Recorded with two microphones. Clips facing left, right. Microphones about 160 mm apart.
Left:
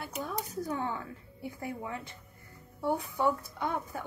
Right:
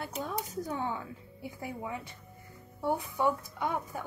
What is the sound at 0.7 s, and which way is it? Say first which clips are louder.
Speech: even; 20° right (ahead or behind).